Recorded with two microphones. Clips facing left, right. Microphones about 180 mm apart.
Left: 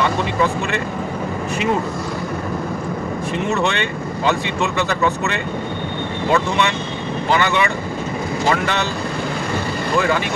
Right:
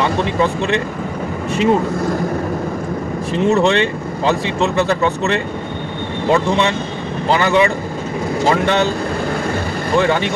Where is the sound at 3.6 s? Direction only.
30° right (ahead or behind).